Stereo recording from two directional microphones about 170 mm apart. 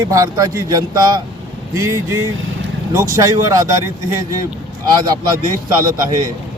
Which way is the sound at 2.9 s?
20° right (ahead or behind).